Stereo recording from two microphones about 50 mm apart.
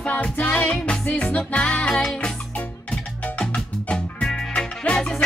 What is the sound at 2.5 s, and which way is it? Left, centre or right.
Music, left.